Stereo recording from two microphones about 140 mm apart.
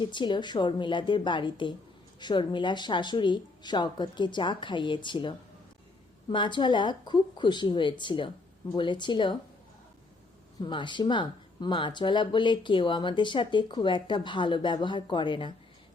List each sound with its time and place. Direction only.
0.0 s speech: 35° left (ahead or behind)
10.6 s speech: 35° left (ahead or behind)